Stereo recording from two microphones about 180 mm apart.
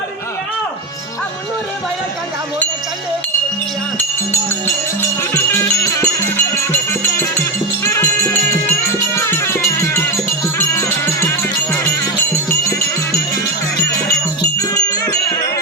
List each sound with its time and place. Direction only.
3.9 s music: 15° left (ahead or behind)
7.9 s music: 15° left (ahead or behind)
14.6 s music: 15° left (ahead or behind)